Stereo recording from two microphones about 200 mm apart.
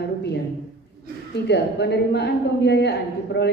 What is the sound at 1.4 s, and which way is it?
A woman's voice, 55° left (ahead or behind).